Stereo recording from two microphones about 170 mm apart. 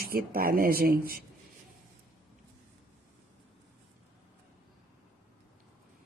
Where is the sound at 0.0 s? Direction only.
60° right (ahead or behind).